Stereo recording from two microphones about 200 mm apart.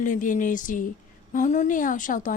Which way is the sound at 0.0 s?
40° left (ahead or behind).